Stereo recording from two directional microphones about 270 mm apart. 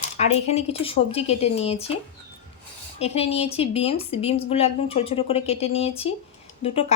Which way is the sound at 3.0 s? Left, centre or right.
Left.